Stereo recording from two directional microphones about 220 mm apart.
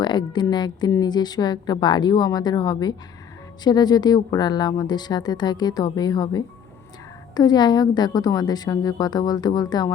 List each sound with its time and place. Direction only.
0.0 s a woman's voice: 20° left (ahead or behind)